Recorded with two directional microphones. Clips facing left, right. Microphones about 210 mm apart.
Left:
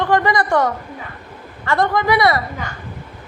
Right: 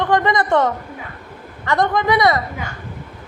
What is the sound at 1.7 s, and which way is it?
Speech, 20° right (ahead or behind).